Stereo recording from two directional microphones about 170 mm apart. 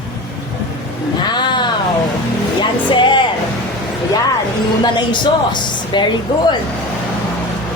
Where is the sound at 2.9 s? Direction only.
30° left (ahead or behind).